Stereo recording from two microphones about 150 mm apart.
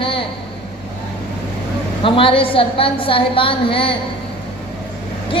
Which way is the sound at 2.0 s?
35° left (ahead or behind).